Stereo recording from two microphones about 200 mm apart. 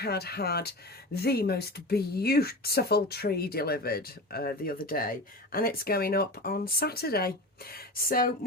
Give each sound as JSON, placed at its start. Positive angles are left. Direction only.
{"t": 0.0, "sound": "speech", "side_deg": 55}